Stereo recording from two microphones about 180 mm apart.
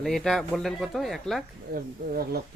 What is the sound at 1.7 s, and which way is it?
Speech, 55° right (ahead or behind).